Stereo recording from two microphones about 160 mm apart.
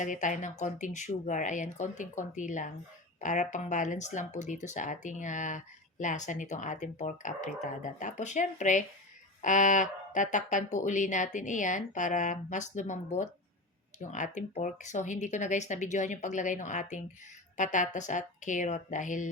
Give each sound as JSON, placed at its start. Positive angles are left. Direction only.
{"t": 0.0, "sound": "speech", "side_deg": 50}